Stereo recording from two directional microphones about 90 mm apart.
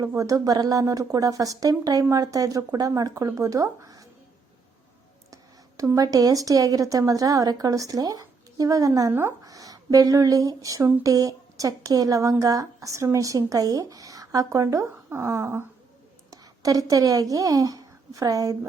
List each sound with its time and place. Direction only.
0.2 s speech: 40° right (ahead or behind)
5.3 s a woman's voice: 40° right (ahead or behind)